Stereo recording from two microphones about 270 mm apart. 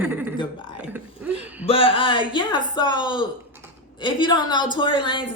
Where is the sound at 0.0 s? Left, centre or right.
Centre.